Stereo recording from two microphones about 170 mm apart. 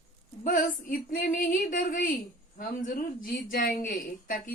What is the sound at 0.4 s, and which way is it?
Speech, 55° left (ahead or behind).